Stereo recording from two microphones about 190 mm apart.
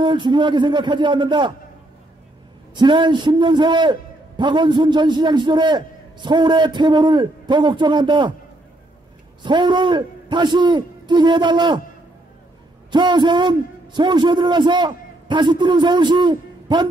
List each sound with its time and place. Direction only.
0.0 s a man's voice: 25° right (ahead or behind)
2.7 s a man's voice: 25° right (ahead or behind)
9.4 s a man's voice: 25° right (ahead or behind)
12.9 s a man's voice: 25° right (ahead or behind)